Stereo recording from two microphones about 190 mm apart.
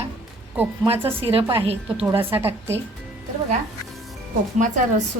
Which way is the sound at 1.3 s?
30° right (ahead or behind).